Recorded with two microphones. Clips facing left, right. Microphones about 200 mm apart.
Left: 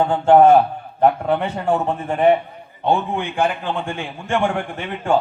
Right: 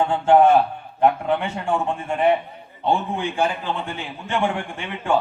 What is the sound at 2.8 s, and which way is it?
A man's voice, 60° left (ahead or behind).